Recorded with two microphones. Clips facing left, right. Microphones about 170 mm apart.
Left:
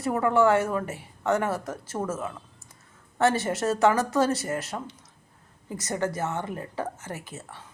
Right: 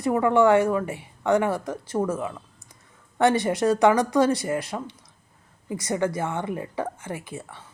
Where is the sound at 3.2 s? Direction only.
15° right (ahead or behind).